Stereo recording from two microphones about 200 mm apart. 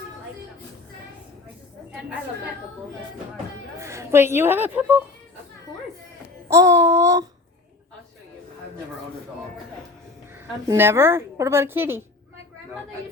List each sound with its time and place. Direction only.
3.8 s a woman's voice: 15° right (ahead or behind)
6.5 s a woman's voice: 15° right (ahead or behind)
10.7 s a woman's voice: 10° right (ahead or behind)